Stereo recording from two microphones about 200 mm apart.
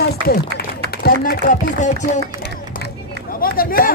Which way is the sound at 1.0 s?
45° left (ahead or behind).